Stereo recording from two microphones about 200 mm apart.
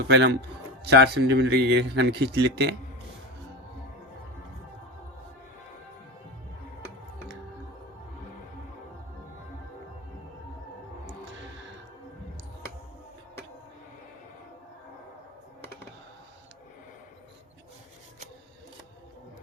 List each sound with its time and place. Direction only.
0.1 s a man's voice: 65° right (ahead or behind)